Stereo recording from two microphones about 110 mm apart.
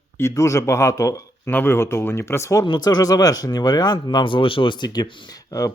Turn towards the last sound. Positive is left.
turn(degrees=30)  # may be behind; listen again after turning